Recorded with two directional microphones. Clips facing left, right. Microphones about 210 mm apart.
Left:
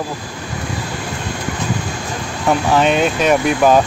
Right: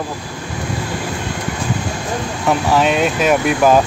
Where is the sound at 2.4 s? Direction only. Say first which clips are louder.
Left 1 dB; centre (ahead or behind).